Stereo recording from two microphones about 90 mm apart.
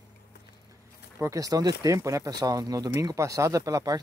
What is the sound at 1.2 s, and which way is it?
Speech, 40° right (ahead or behind).